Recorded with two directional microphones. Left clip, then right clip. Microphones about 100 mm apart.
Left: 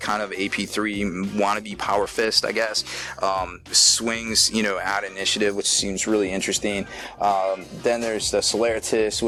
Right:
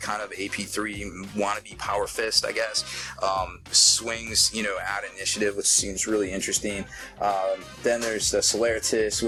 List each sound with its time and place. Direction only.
0.1 s speech: 40° left (ahead or behind)
3.2 s speech: 20° left (ahead or behind)
4.6 s speech: 45° left (ahead or behind)
5.3 s speech: 25° left (ahead or behind)
5.5 s speech: 10° left (ahead or behind)